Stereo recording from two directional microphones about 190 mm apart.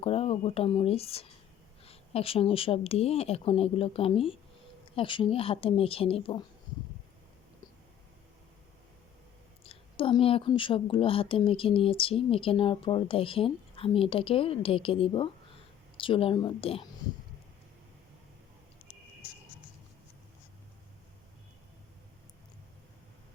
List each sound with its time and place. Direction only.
0.0 s a woman's voice: 30° left (ahead or behind)
9.6 s a woman's voice: 30° left (ahead or behind)